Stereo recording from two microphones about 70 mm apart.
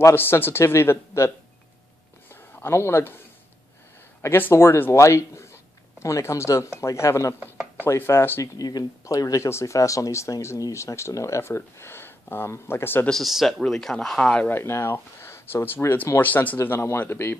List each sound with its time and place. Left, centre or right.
0.1 s speech: left
2.2 s a sound: left
4.2 s speech: left
7.8 s speech: left
8.5 s speech: left
9.0 s speech: left
9.5 s speech: left
13.1 s speech: centre
14.5 s speech: left